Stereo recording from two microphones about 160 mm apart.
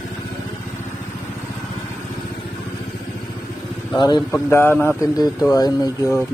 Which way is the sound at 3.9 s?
25° left (ahead or behind).